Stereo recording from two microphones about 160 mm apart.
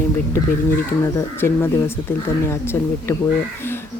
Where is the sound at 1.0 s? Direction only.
15° left (ahead or behind).